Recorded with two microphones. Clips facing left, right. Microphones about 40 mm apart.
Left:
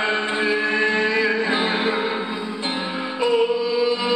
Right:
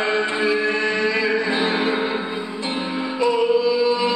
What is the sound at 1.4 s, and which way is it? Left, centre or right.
Music, left.